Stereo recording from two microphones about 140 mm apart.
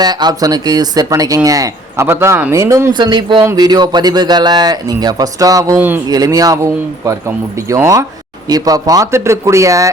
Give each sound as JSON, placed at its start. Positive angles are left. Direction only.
{"t": 0.0, "sound": "a man's voice", "side_deg": -30}